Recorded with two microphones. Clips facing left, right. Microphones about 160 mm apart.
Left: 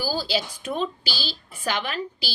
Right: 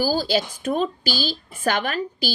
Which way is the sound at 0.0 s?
45° right (ahead or behind).